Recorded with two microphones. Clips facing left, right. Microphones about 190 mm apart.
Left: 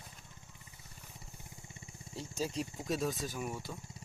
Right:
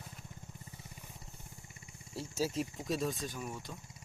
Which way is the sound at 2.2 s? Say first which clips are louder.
Right 2 dB; 5° right (ahead or behind).